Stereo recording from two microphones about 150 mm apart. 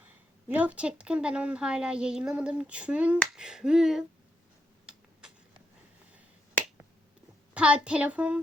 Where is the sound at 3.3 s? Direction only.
5° right (ahead or behind).